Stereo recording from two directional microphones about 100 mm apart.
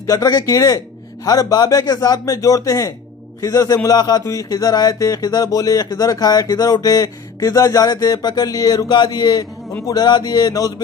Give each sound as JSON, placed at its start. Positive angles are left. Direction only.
{"t": 0.1, "sound": "speech", "side_deg": 40}